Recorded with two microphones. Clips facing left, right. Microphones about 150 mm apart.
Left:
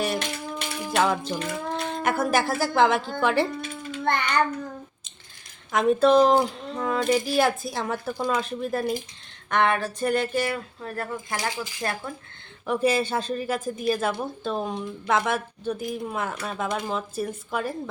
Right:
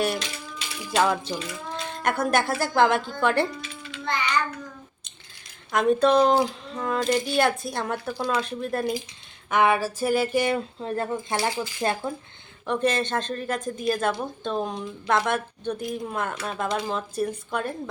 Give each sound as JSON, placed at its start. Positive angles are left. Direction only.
{"t": 0.9, "sound": "a woman's voice", "side_deg": 0}
{"t": 3.6, "sound": "child singing", "side_deg": 45}
{"t": 5.7, "sound": "a woman's voice", "side_deg": 0}
{"t": 9.5, "sound": "a sound", "side_deg": -10}
{"t": 10.4, "sound": "speech", "side_deg": -20}
{"t": 12.6, "sound": "a woman's voice", "side_deg": 5}